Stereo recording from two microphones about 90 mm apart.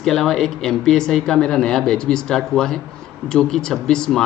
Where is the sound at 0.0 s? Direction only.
5° left (ahead or behind).